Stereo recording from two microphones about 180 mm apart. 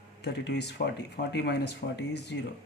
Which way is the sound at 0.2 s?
70° left (ahead or behind).